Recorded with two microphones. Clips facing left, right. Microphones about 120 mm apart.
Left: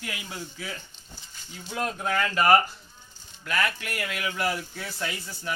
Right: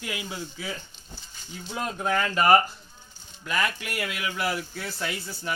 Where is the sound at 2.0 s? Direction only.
25° right (ahead or behind).